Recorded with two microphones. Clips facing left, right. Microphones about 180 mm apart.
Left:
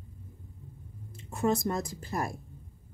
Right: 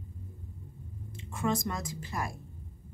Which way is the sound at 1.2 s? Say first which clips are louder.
Left 3 dB; 40° left (ahead or behind).